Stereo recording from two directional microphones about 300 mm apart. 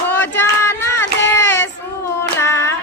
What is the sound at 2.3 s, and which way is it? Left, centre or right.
Music, centre.